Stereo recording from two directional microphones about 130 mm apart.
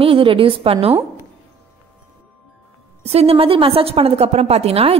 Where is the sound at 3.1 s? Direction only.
50° right (ahead or behind).